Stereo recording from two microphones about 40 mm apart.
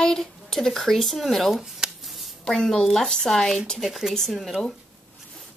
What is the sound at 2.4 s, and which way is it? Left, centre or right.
A child's voice, centre.